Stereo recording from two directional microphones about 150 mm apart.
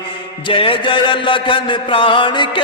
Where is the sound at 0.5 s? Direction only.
35° left (ahead or behind).